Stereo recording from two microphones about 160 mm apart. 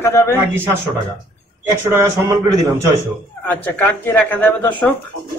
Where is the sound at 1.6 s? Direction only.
15° right (ahead or behind).